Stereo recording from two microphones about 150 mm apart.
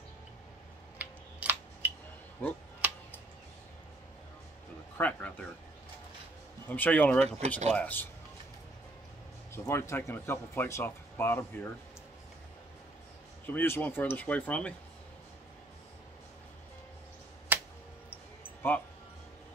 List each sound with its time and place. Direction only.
0.9 s a sound: 10° right (ahead or behind)
4.9 s speech: 10° left (ahead or behind)
6.7 s speech: 10° left (ahead or behind)
9.7 s speech: 15° left (ahead or behind)
13.5 s speech: 15° left (ahead or behind)
17.5 s a sound: 10° right (ahead or behind)